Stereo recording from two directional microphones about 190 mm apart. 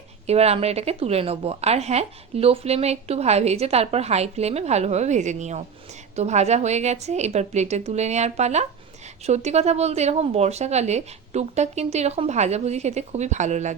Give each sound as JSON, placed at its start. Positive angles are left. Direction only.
{"t": 0.3, "sound": "a woman's voice", "side_deg": -35}